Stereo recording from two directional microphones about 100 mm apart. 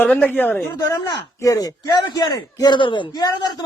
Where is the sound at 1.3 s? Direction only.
35° left (ahead or behind); by 3.2 s 55° left (ahead or behind).